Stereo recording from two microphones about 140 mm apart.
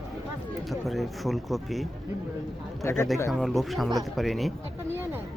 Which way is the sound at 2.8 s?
20° left (ahead or behind).